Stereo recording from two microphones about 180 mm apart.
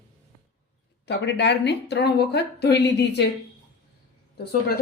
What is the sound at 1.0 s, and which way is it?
A woman's voice, 75° left (ahead or behind).